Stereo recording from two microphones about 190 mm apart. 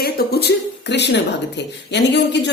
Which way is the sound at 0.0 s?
55° left (ahead or behind).